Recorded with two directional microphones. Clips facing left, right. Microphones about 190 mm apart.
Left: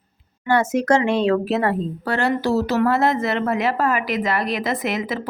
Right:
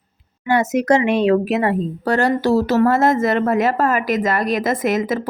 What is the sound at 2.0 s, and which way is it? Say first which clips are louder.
Speech: right 4 dB; 45° right (ahead or behind).